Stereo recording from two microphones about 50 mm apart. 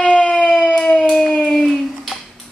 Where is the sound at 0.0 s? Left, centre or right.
Left.